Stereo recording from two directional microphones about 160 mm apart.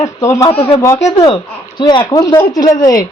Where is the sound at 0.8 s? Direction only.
20° left (ahead or behind).